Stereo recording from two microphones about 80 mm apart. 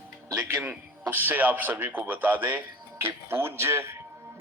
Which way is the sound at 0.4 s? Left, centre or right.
Right.